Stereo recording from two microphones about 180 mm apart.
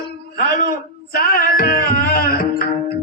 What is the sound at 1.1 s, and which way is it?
Music, 55° left (ahead or behind).